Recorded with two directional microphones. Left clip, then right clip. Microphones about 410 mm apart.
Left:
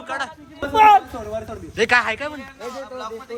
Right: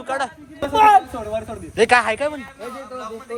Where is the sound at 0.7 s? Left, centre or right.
Right.